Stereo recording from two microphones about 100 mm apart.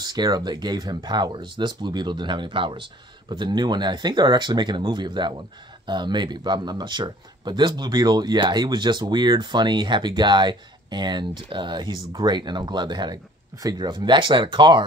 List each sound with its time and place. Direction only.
0.0 s speech: 45° right (ahead or behind)